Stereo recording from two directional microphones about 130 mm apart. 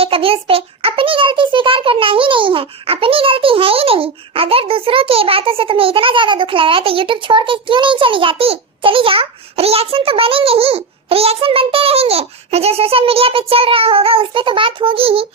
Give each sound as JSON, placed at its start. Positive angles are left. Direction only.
{"t": 0.0, "sound": "a child's voice", "side_deg": -45}